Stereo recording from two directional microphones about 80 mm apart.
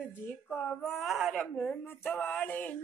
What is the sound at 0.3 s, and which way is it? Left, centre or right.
Speech, left.